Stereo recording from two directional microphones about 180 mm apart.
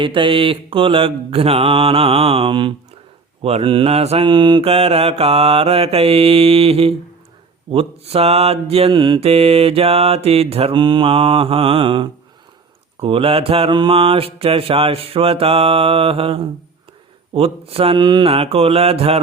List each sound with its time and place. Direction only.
0.0 s mantra: 30° right (ahead or behind)